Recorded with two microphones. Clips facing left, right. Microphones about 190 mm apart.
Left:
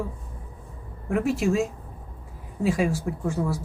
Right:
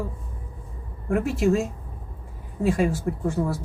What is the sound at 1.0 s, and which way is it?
A man's voice, centre (ahead or behind).